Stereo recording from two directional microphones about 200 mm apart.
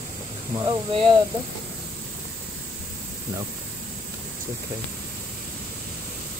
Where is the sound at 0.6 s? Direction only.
25° right (ahead or behind).